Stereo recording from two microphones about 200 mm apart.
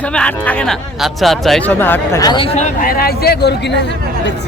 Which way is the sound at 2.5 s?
45° left (ahead or behind).